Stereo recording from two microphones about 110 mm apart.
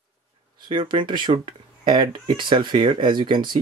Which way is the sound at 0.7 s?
45° right (ahead or behind).